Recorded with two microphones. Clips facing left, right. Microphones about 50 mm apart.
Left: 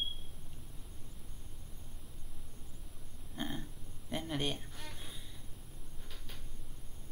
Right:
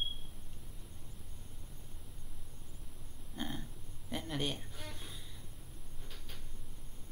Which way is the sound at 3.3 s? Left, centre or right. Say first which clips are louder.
Left 1 dB; centre.